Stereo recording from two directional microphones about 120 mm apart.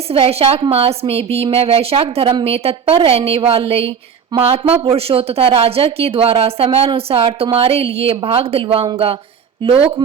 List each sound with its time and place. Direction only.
0.1 s speech: 55° right (ahead or behind)